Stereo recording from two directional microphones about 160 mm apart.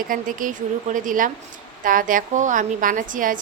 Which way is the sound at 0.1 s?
55° right (ahead or behind).